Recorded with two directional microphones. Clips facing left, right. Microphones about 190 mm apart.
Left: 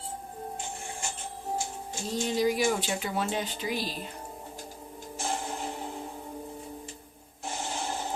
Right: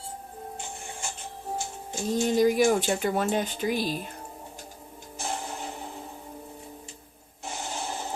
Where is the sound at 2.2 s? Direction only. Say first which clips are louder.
Right 5 dB; 50° right (ahead or behind).